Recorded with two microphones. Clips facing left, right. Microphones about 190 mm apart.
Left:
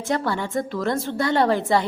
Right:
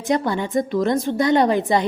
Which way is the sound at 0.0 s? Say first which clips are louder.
Right 3 dB; 15° right (ahead or behind).